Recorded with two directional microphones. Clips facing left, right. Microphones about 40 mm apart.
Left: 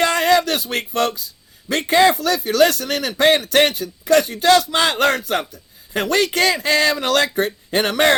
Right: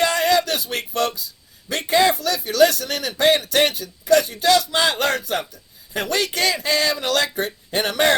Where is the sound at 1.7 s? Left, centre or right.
Left.